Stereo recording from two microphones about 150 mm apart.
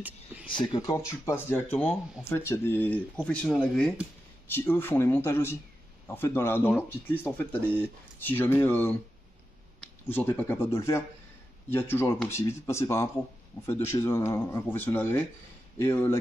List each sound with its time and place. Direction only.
0.0 s a sound: 10° right (ahead or behind)
0.5 s speech: 35° left (ahead or behind)
0.9 s speech: 15° left (ahead or behind)
3.4 s speech: centre (ahead or behind)
4.5 s speech: 15° left (ahead or behind)
8.2 s speech: 15° left (ahead or behind)